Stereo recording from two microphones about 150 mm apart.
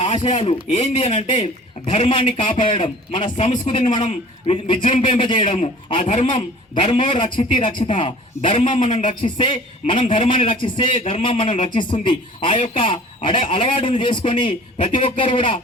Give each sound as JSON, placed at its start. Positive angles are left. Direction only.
{"t": 0.0, "sound": "a man's voice", "side_deg": 50}
{"t": 8.4, "sound": "a man's voice", "side_deg": 55}
{"t": 9.0, "sound": "speech", "side_deg": 35}